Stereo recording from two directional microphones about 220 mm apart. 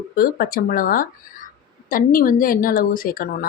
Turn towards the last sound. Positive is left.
turn(degrees=40)  # may be behind; listen again after turning